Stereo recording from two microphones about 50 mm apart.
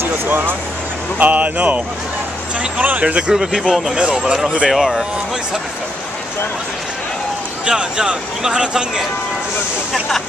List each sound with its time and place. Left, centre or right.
0.0 s vehicle: right
1.2 s speech: right
3.5 s speech: centre
4.6 s speech: centre
7.6 s speech: centre